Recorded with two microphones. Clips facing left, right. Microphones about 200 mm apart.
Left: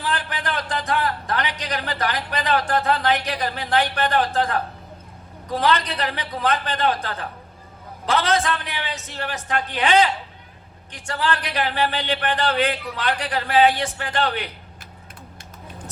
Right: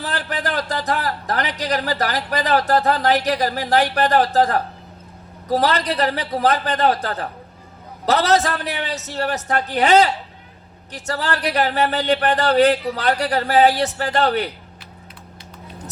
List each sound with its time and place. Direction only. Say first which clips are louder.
0.0 s a man's voice: right 2 dB; 35° right (ahead or behind)